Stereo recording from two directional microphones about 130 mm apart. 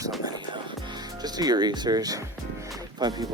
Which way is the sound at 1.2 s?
30° right (ahead or behind).